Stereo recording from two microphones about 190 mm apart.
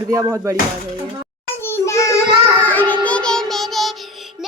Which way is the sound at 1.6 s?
15° left (ahead or behind).